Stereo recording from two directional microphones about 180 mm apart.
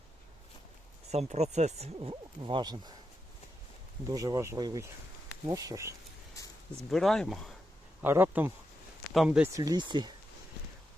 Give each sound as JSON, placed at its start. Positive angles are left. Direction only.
{"t": 1.1, "sound": "speech", "side_deg": -35}
{"t": 2.0, "sound": "speech", "side_deg": -30}
{"t": 4.1, "sound": "speech", "side_deg": -20}
{"t": 6.9, "sound": "speech", "side_deg": 0}
{"t": 8.0, "sound": "speech", "side_deg": -10}
{"t": 9.5, "sound": "speech", "side_deg": -20}